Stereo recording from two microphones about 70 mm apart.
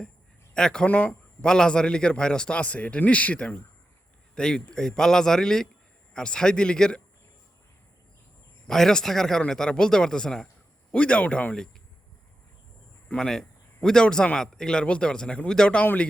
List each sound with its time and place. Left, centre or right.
0.5 s a man's voice: centre
8.6 s a man's voice: centre
13.1 s a man's voice: centre
15.8 s speech: left